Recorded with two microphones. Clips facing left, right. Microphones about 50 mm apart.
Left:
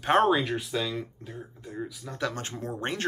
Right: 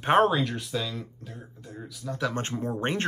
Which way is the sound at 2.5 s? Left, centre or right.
Right.